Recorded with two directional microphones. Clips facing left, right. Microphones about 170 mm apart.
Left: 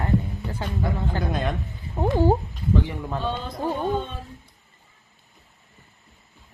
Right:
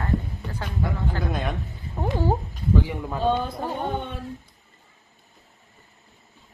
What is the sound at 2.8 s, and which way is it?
Speech, 5° right (ahead or behind).